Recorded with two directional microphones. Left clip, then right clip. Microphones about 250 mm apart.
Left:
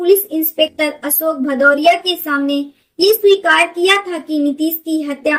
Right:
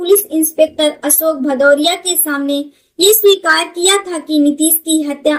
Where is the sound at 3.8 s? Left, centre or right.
Centre.